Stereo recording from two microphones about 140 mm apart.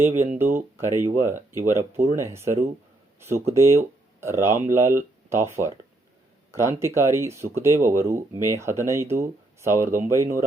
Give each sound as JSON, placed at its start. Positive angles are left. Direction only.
{"t": 0.0, "sound": "speech", "side_deg": -15}